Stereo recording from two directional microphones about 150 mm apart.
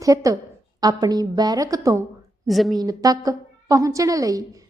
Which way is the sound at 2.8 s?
25° right (ahead or behind).